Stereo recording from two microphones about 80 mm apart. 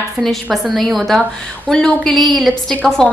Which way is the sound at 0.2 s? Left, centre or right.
Centre.